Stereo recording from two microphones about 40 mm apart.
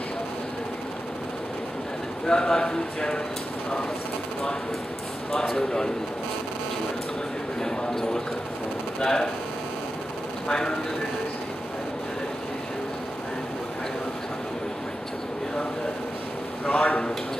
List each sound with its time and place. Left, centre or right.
2.2 s speech: centre
5.3 s speech: centre
7.6 s speech: centre
10.5 s speech: centre
16.6 s a man's voice: left